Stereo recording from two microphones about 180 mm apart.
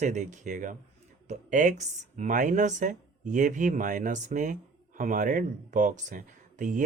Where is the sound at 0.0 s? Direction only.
40° right (ahead or behind).